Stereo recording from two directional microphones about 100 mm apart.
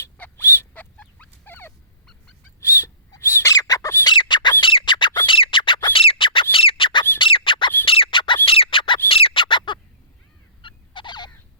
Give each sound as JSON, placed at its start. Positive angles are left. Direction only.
{"t": 0.0, "sound": "dog", "side_deg": 25}
{"t": 2.6, "sound": "fowl", "side_deg": 25}
{"t": 3.2, "sound": "bird", "side_deg": 25}
{"t": 3.5, "sound": "squawk", "side_deg": 40}
{"t": 4.0, "sound": "squawk", "side_deg": 50}
{"t": 4.6, "sound": "a sound", "side_deg": 55}
{"t": 5.2, "sound": "bird", "side_deg": 55}
{"t": 7.2, "sound": "squeak", "side_deg": 60}
{"t": 8.4, "sound": "squawk", "side_deg": 65}
{"t": 9.0, "sound": "bird", "side_deg": 65}
{"t": 10.6, "sound": "fowl", "side_deg": 55}